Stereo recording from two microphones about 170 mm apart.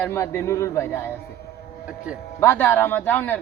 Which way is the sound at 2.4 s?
15° left (ahead or behind).